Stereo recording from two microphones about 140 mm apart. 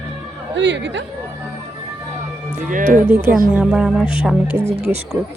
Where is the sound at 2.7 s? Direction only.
70° right (ahead or behind).